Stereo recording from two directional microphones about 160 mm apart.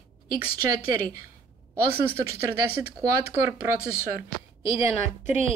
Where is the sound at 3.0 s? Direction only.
20° right (ahead or behind).